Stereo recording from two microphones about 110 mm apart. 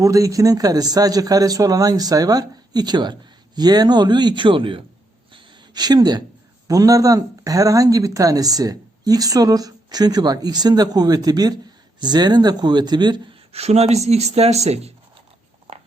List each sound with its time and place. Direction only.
0.0 s speech: 30° right (ahead or behind); by 4.9 s 50° right (ahead or behind)
5.3 s a sound: 40° right (ahead or behind)
6.7 s speech: 30° right (ahead or behind)
13.5 s speech: 70° right (ahead or behind)